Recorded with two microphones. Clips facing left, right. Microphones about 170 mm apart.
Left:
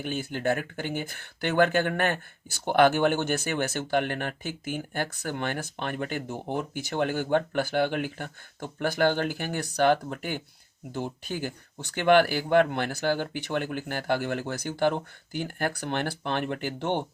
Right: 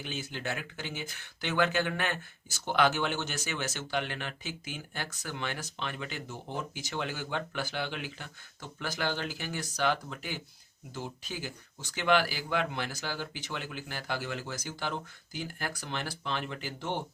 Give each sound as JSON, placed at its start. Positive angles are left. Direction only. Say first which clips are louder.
{"t": 0.0, "sound": "speech", "louder": "left 8 dB", "side_deg": 55}